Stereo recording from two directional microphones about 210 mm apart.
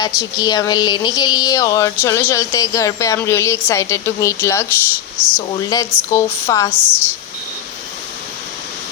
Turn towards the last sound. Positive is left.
turn(degrees=-5)  # may be behind; listen again after turning